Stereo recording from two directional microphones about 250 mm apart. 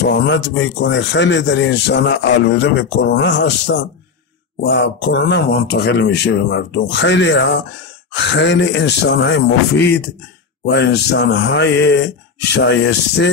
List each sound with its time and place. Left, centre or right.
0.0 s speech: left